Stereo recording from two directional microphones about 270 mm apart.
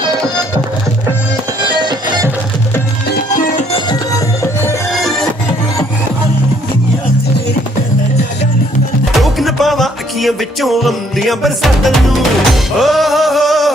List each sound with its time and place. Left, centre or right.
1.8 s music: centre
3.3 s music: left; by 4.8 s centre
4.9 s music: centre
9.2 s music: centre